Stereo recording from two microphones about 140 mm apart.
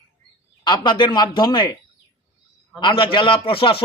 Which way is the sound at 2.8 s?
35° left (ahead or behind).